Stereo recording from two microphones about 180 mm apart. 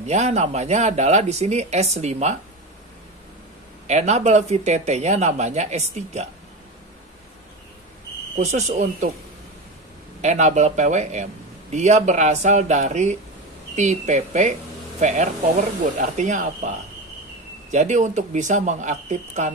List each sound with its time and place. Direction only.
0.0 s speech: 40° right (ahead or behind)
3.8 s speech: 40° right (ahead or behind)
8.4 s speech: 40° right (ahead or behind)
10.2 s speech: 40° right (ahead or behind)